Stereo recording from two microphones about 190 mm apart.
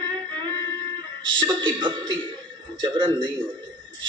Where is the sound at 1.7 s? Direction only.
25° right (ahead or behind).